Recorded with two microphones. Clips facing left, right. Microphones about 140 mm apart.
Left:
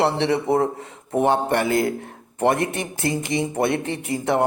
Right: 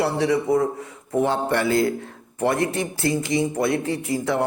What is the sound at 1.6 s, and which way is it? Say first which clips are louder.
Speech: even; 20° left (ahead or behind).